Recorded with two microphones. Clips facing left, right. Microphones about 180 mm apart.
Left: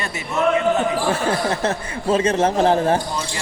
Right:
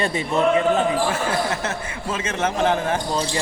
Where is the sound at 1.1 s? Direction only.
35° left (ahead or behind).